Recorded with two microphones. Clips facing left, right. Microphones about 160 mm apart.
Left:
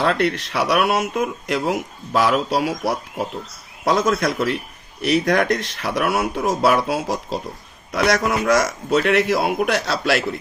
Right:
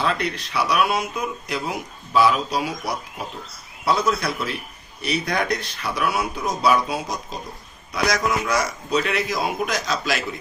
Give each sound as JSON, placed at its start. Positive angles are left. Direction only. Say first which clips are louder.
{"t": 0.0, "sound": "speech", "louder": "left 5 dB", "side_deg": 75}
{"t": 3.8, "sound": "speech", "louder": "left 3 dB", "side_deg": 90}